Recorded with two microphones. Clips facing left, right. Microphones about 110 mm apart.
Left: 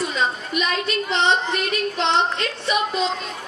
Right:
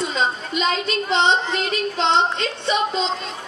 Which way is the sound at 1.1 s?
25° right (ahead or behind).